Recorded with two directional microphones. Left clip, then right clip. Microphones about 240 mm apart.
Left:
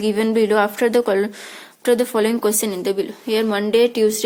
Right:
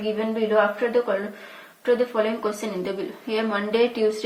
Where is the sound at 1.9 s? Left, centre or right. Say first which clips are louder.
Left 4 dB; left.